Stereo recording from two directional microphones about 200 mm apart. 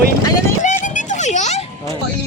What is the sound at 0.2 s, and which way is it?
Vehicle, 15° left (ahead or behind).